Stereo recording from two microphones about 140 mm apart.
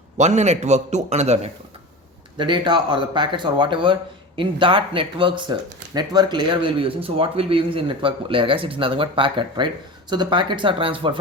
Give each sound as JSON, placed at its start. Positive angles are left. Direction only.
{"t": 0.2, "sound": "a man's voice", "side_deg": -55}
{"t": 2.4, "sound": "speech", "side_deg": -35}